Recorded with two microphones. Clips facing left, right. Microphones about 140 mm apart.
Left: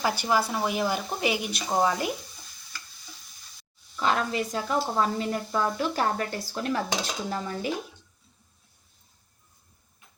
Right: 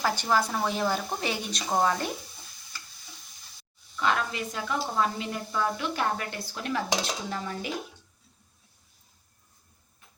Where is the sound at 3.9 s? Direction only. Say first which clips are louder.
Left 2 dB; 35° left (ahead or behind).